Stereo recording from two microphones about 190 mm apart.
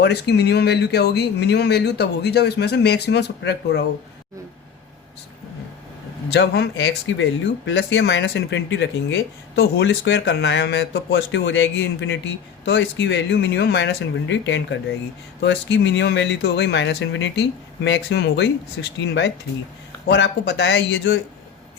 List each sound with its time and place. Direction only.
0.0 s speech: 60° left (ahead or behind)
6.3 s speech: 60° left (ahead or behind)
17.8 s speech: 65° left (ahead or behind); by 21.2 s 90° left